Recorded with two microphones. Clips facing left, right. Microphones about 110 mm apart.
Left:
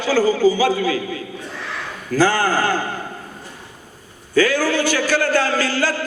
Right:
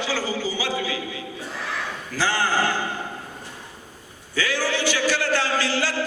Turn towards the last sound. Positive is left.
turn(degrees=45)  # may be behind; listen again after turning